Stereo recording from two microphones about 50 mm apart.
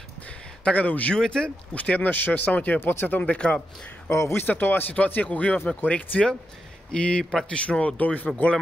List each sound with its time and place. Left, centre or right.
0.7 s speech: left
1.1 s speech: centre
1.8 s speech: left
2.8 s speech: left
3.1 s speech: left
3.3 s speech: centre
4.1 s speech: left
4.4 s speech: left